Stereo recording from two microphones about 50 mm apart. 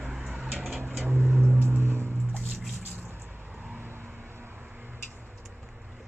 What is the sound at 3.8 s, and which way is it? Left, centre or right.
Vehicle, right.